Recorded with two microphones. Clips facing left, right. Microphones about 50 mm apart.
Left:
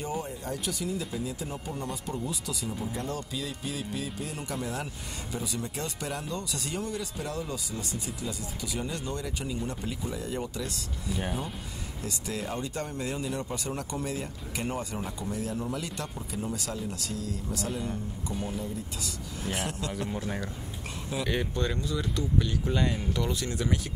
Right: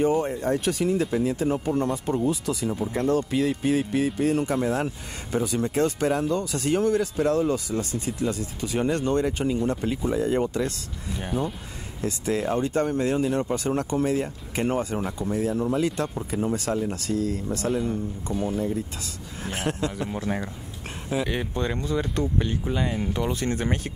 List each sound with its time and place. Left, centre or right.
0.0 s speech: right
9.6 s speech: right
11.1 s speech: centre
12.0 s speech: right
18.3 s speech: centre
19.4 s speech: right
21.2 s speech: centre
21.7 s speech: right
22.7 s speech: centre
23.3 s speech: right